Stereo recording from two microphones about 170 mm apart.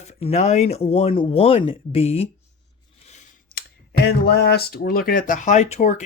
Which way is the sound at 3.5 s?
65° left (ahead or behind).